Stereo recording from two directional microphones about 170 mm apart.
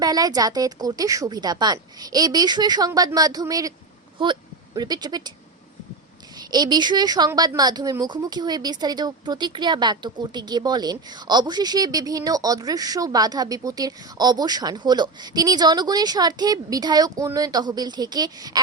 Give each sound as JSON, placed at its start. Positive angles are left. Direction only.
{"t": 0.0, "sound": "a woman's voice", "side_deg": -25}
{"t": 6.3, "sound": "a woman's voice", "side_deg": -25}